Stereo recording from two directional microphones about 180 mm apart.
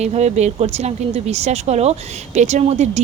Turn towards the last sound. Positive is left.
turn(degrees=-35)  # may be behind; listen again after turning